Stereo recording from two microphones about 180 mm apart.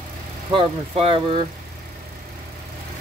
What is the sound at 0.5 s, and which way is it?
Speech, 30° right (ahead or behind).